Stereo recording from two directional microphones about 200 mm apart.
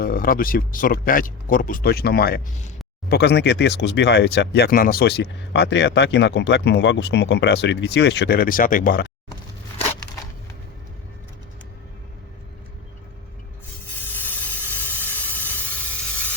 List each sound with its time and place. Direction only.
0.0 s speech: 45° left (ahead or behind)
14.1 s steam: 10° left (ahead or behind)